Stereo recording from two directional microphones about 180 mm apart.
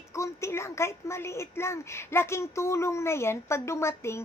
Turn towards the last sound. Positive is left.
turn(degrees=15)  # may be behind; listen again after turning